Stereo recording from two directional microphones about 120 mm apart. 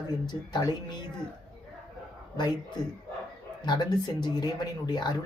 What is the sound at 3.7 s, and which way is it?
Speech, 35° left (ahead or behind).